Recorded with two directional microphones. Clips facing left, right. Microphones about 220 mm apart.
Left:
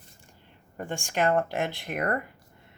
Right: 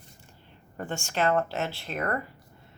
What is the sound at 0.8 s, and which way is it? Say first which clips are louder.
Speech: left 1 dB; 15° left (ahead or behind).